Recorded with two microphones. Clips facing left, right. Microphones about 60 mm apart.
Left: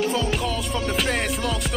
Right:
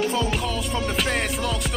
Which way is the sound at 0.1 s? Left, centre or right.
Centre.